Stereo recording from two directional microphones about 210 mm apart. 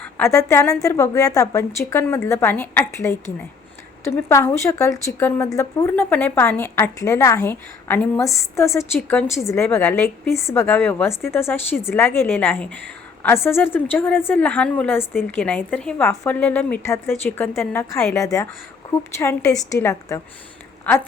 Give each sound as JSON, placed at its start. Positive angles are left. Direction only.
{"t": 0.0, "sound": "a woman's voice", "side_deg": 10}